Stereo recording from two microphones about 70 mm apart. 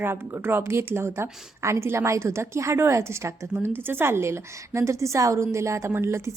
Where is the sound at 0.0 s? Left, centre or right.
Right.